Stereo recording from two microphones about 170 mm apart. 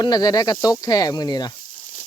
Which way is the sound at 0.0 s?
25° left (ahead or behind).